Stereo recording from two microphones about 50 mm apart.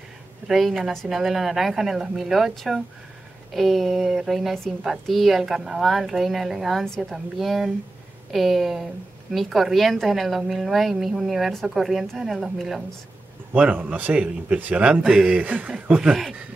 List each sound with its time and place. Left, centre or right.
0.5 s a woman's voice: centre
13.7 s a man's voice: right
14.1 s a man's voice: right
15.0 s speech: centre
15.3 s a man's voice: right
15.9 s speech: centre